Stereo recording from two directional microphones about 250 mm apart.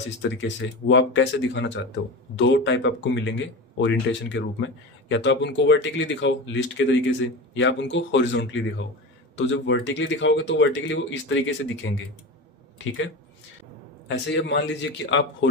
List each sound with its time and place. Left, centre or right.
0.2 s speech: left
14.1 s speech: left